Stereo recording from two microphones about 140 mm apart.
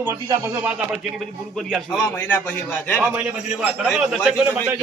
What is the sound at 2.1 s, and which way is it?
Speech, 15° left (ahead or behind).